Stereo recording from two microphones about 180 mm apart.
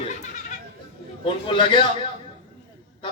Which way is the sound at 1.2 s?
25° left (ahead or behind).